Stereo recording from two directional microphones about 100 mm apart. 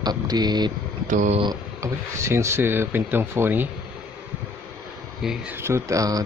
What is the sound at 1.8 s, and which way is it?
Speech, 30° right (ahead or behind).